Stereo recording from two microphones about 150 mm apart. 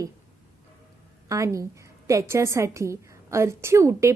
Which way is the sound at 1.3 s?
20° right (ahead or behind).